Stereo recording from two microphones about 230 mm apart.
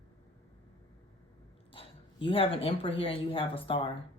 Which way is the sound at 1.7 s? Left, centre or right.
Left.